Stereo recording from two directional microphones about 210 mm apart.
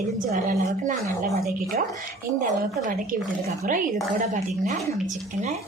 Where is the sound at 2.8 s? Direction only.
40° right (ahead or behind).